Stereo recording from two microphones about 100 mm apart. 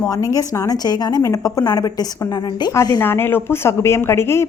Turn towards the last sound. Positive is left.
turn(degrees=25)  # may be behind; listen again after turning